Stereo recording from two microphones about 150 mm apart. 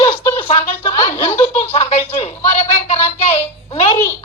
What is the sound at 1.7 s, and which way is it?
A woman's voice, 45° left (ahead or behind).